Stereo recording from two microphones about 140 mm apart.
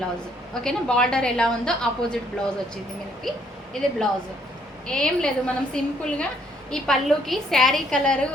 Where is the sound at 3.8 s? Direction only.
5° left (ahead or behind).